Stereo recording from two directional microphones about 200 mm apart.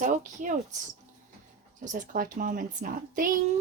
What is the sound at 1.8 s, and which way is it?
A woman's voice, 40° right (ahead or behind).